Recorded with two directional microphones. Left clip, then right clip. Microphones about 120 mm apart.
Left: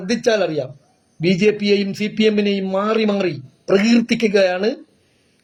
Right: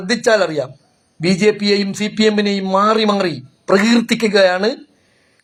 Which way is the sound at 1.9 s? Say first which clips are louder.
Right 2 dB; 20° left (ahead or behind).